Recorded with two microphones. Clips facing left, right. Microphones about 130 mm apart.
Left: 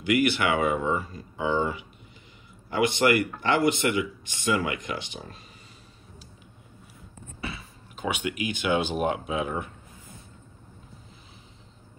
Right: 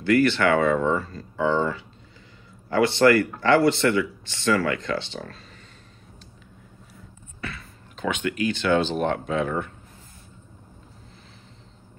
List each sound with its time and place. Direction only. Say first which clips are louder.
0.0 s a man's voice: right 4 dB; 15° left (ahead or behind)
7.4 s speech: right 1 dB; 10° left (ahead or behind)